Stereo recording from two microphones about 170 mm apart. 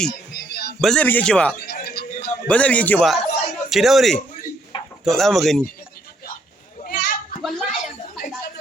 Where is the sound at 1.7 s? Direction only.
75° left (ahead or behind).